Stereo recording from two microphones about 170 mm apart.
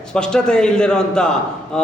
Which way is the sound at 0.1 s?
5° left (ahead or behind).